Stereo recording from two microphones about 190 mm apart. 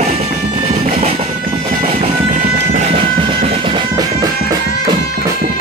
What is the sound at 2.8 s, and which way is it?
Music, 30° right (ahead or behind).